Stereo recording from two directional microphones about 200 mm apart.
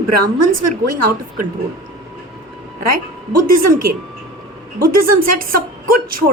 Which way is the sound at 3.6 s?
45° right (ahead or behind).